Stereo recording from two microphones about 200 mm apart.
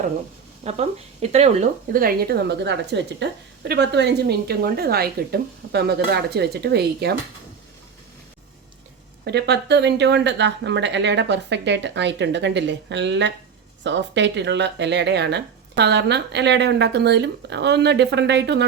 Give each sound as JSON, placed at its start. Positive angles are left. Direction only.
{"t": 0.6, "sound": "speech", "side_deg": -30}
{"t": 1.9, "sound": "a woman's voice", "side_deg": -45}
{"t": 9.2, "sound": "speech", "side_deg": -55}